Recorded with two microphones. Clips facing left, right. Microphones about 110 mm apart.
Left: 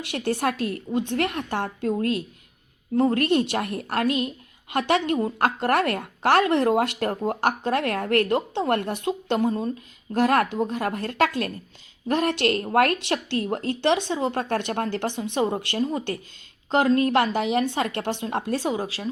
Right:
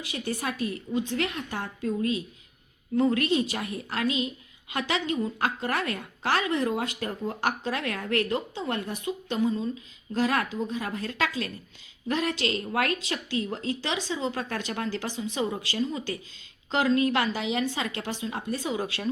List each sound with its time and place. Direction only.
0.0 s a woman's voice: 70° left (ahead or behind)
0.9 s a woman's voice: 55° left (ahead or behind)
2.9 s a woman's voice: 45° left (ahead or behind); by 7.2 s 70° left (ahead or behind)
7.3 s a woman's voice: 50° left (ahead or behind); by 18.7 s 80° left
18.7 s speech: 30° left (ahead or behind)